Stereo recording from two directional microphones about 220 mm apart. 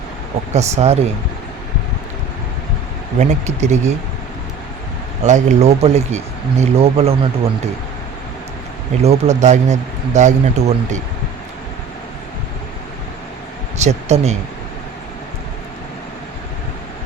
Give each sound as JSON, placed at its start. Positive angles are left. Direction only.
{"t": 0.5, "sound": "speech", "side_deg": -30}
{"t": 3.2, "sound": "speech", "side_deg": -30}
{"t": 5.2, "sound": "speech", "side_deg": -30}
{"t": 9.0, "sound": "speech", "side_deg": -30}
{"t": 13.7, "sound": "speech", "side_deg": -30}